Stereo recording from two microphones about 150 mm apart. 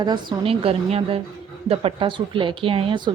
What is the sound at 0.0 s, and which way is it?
A woman's voice, 30° right (ahead or behind).